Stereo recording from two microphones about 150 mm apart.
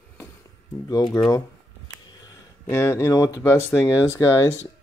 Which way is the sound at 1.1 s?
25° left (ahead or behind).